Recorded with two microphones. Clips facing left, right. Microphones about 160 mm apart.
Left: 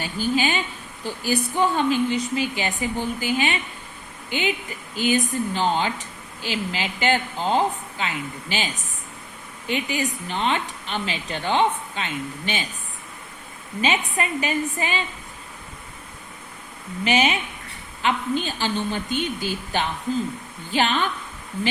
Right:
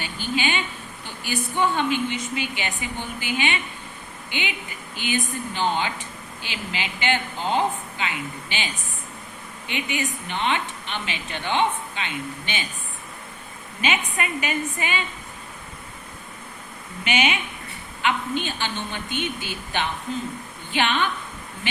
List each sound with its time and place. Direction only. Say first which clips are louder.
0.0 s a woman's voice: left 4 dB; 40° left (ahead or behind)
13.8 s speech: left 2 dB; 35° left (ahead or behind)
17.0 s a woman's voice: left 3 dB; 35° left (ahead or behind)